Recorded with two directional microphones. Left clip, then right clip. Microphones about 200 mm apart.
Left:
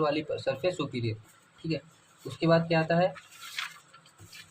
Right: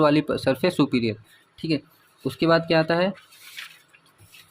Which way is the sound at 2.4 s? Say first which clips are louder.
Right 6 dB; 50° right (ahead or behind).